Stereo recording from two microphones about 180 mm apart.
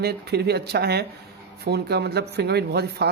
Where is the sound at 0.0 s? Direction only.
65° right (ahead or behind).